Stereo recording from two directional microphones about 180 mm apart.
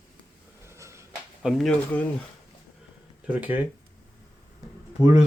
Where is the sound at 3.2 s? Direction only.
10° right (ahead or behind).